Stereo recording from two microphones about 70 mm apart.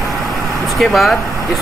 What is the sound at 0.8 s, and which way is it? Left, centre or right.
Speech, centre.